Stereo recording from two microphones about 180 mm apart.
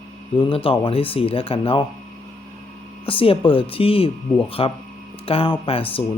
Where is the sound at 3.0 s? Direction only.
30° left (ahead or behind).